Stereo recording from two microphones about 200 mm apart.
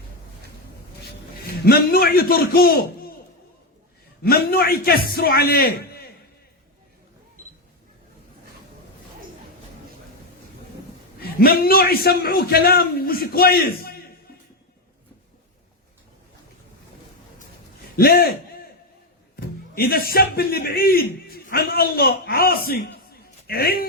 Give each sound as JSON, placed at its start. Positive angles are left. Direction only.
{"t": 1.0, "sound": "a man's voice", "side_deg": 50}
{"t": 4.2, "sound": "a man's voice", "side_deg": 50}
{"t": 11.2, "sound": "a man's voice", "side_deg": 50}
{"t": 17.9, "sound": "a man's voice", "side_deg": 50}
{"t": 19.4, "sound": "a man's voice", "side_deg": 50}